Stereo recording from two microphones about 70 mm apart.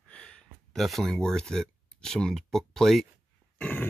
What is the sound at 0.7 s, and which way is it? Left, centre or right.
Speech, centre.